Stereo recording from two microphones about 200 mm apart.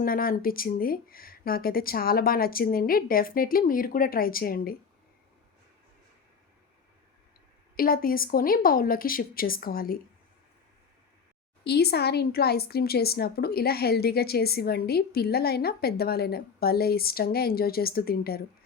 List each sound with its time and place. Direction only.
0.0 s a woman's voice: 45° left (ahead or behind)
7.8 s a woman's voice: 45° left (ahead or behind)
11.6 s a woman's voice: 55° left (ahead or behind)